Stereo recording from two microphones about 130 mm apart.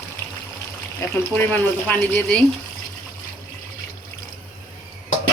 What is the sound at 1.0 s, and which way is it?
Speech, 25° left (ahead or behind).